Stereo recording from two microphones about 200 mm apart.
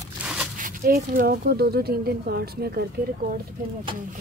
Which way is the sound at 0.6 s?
45° right (ahead or behind).